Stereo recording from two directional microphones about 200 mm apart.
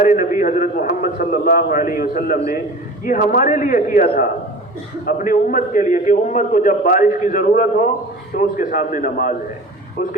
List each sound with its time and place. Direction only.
0.0 s a man's voice: 40° left (ahead or behind)